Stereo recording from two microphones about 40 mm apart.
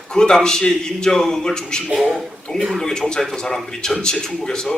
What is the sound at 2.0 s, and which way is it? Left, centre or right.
Speech, centre.